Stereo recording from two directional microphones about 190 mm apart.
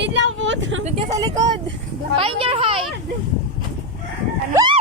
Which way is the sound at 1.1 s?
20° right (ahead or behind).